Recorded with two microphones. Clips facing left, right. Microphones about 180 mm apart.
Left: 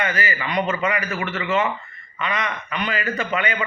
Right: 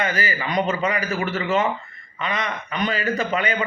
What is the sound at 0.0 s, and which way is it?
A man's voice, 35° right (ahead or behind).